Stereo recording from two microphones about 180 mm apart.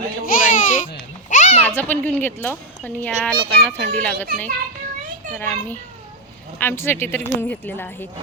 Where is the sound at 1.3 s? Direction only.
40° left (ahead or behind).